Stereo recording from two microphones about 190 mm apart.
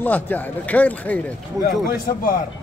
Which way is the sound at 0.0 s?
10° left (ahead or behind).